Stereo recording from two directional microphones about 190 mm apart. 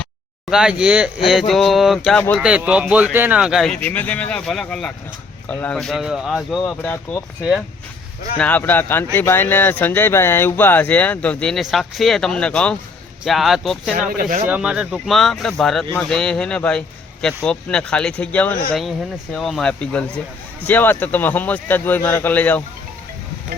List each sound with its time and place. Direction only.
0.5 s a man's voice: 5° right (ahead or behind)
2.4 s a man's voice: 5° right (ahead or behind)
8.4 s a man's voice: 10° left (ahead or behind)
13.9 s speech: 50° right (ahead or behind)
14.4 s a man's voice: 5° right (ahead or behind)